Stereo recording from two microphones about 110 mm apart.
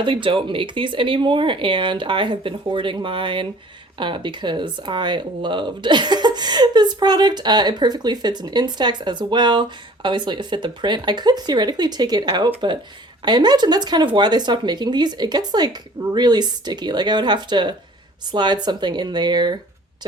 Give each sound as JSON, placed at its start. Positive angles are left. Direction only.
{"t": 0.0, "sound": "speech", "side_deg": -50}